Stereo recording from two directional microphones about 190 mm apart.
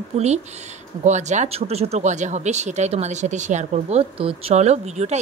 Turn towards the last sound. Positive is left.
turn(degrees=-35)  # may be behind; listen again after turning